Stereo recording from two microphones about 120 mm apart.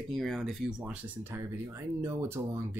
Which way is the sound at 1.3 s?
25° right (ahead or behind).